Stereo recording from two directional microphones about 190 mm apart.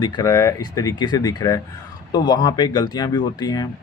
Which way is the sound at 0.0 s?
20° left (ahead or behind).